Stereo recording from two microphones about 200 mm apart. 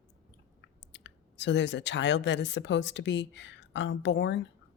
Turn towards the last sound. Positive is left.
turn(degrees=60)  # may be behind; listen again after turning